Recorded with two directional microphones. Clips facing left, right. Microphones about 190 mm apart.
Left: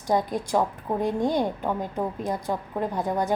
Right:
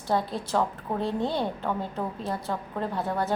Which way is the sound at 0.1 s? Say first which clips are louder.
Left 3 dB; 15° left (ahead or behind).